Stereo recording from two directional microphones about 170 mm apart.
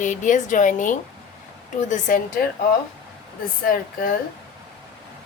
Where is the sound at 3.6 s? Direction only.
55° left (ahead or behind).